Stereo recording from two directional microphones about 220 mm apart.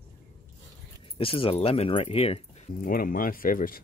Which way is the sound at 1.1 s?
25° left (ahead or behind).